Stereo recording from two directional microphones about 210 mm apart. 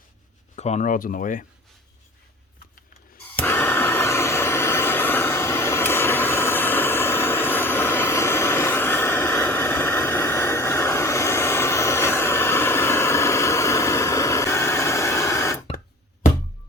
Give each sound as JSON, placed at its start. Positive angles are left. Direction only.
{"t": 0.5, "sound": "speech", "side_deg": 30}
{"t": 3.4, "sound": "vehicle", "side_deg": 10}